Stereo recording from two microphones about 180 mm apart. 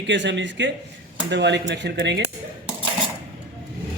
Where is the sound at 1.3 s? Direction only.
75° right (ahead or behind).